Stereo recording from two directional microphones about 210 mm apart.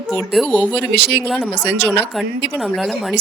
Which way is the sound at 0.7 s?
55° right (ahead or behind).